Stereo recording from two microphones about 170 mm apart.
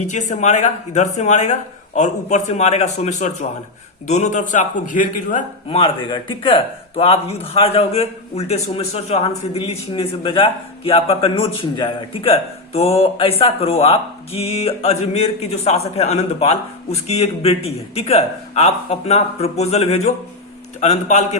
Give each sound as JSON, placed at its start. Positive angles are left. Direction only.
{"t": 0.1, "sound": "speech", "side_deg": 45}
{"t": 5.6, "sound": "a man's voice", "side_deg": 30}